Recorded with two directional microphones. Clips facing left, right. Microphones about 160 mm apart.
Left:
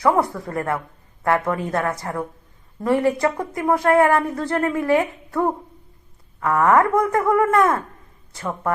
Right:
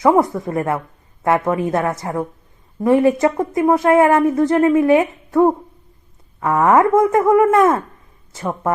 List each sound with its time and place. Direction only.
0.0 s a woman's voice: 20° right (ahead or behind)